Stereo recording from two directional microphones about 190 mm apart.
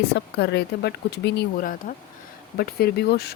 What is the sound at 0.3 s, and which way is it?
Speech, 60° left (ahead or behind).